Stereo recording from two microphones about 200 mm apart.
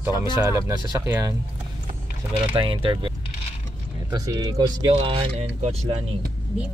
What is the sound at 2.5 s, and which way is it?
Speech, 25° right (ahead or behind).